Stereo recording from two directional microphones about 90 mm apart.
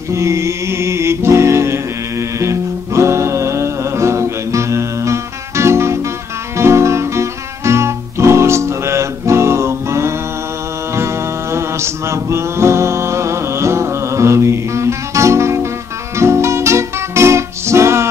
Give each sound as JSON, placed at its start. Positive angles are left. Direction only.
{"t": 0.1, "sound": "music", "side_deg": -35}
{"t": 11.5, "sound": "music", "side_deg": -30}